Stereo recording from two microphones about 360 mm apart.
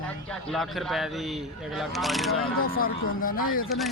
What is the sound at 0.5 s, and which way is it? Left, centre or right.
Speech, centre.